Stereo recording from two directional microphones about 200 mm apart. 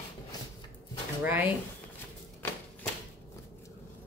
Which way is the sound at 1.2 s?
10° right (ahead or behind).